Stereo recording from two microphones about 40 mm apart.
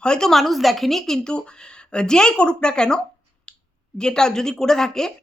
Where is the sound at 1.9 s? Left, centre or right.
Left.